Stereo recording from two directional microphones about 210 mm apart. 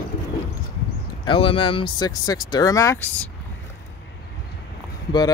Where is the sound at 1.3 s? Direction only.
25° left (ahead or behind).